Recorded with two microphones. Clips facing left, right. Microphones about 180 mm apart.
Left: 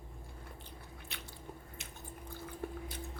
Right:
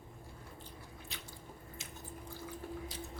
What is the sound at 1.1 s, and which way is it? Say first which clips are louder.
Squish: left 2 dB; 65° left (ahead or behind).